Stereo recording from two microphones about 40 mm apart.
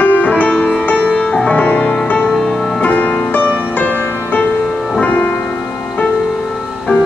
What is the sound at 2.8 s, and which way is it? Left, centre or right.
Music, left.